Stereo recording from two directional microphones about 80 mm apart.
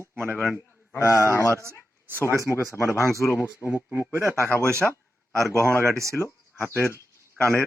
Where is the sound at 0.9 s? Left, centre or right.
Left.